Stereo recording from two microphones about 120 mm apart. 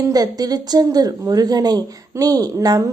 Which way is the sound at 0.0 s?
30° right (ahead or behind).